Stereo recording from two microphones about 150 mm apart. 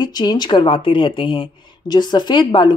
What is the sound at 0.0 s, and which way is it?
A woman's voice, 30° left (ahead or behind).